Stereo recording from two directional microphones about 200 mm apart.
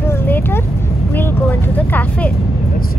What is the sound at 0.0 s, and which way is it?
Vehicle, 10° left (ahead or behind).